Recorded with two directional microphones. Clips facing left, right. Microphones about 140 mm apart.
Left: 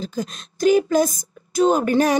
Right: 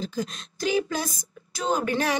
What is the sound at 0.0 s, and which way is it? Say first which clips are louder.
A woman's voice: left 3 dB; 45° left (ahead or behind).